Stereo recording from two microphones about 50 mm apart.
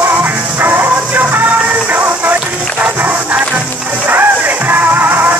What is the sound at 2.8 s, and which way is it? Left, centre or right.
Crowd, right.